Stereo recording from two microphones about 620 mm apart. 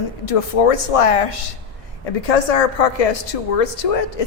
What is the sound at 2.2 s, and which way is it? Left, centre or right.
A woman's voice, left.